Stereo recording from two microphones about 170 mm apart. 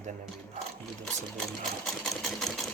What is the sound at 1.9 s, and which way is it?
Sewing machine, centre (ahead or behind).